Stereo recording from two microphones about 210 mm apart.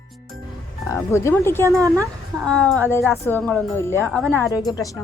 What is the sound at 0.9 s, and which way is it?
Speech, 15° left (ahead or behind).